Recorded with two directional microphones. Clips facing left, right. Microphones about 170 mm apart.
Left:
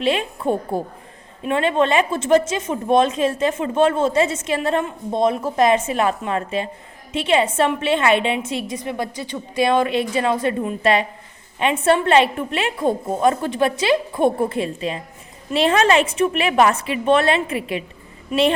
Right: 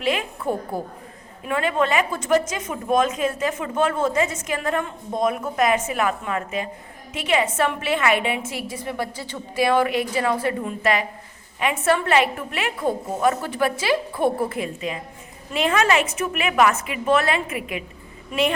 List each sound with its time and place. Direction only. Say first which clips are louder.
0.0 s a woman's voice: left 4 dB; 30° left (ahead or behind)